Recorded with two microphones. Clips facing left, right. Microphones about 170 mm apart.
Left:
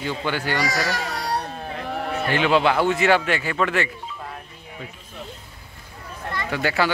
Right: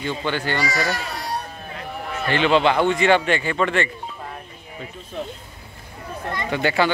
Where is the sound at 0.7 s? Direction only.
85° left.